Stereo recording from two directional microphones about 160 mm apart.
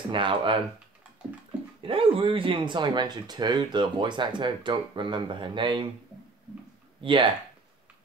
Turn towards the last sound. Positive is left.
turn(degrees=-35)  # may be behind; listen again after turning